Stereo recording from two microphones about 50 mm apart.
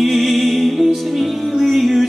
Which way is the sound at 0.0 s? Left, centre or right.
Centre.